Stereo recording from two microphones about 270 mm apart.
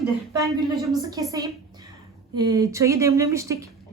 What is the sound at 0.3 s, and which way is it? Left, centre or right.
Speech, centre.